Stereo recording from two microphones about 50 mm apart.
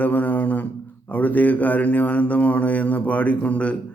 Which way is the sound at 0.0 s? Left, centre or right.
Left.